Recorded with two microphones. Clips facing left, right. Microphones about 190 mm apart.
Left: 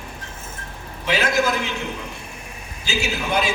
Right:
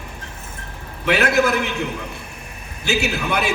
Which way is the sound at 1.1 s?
60° right (ahead or behind).